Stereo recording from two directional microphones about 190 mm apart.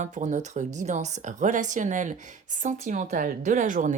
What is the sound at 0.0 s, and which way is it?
Speech, 40° right (ahead or behind).